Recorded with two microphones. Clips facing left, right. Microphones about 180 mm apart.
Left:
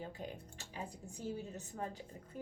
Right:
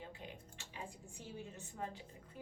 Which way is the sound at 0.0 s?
40° left (ahead or behind).